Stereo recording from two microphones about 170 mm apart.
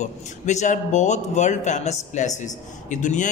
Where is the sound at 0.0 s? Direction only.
45° left (ahead or behind).